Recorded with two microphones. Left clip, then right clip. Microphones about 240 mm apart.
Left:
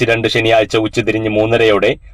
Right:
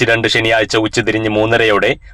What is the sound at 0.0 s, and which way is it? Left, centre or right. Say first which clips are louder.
Speech: right 1 dB; right.